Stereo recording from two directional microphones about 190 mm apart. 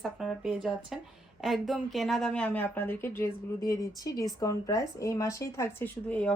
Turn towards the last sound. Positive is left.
turn(degrees=5)  # may be behind; listen again after turning